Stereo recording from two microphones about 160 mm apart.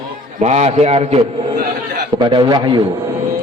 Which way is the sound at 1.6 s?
70° right (ahead or behind).